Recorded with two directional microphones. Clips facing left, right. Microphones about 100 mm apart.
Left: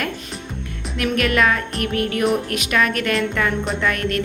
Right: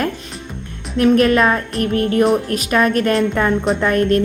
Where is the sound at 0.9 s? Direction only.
35° right (ahead or behind).